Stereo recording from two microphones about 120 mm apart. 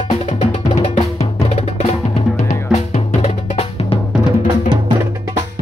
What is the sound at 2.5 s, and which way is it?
Drum, 75° left (ahead or behind).